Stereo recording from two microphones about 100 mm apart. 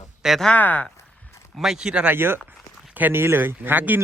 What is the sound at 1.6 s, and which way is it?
A man's voice, 5° right (ahead or behind).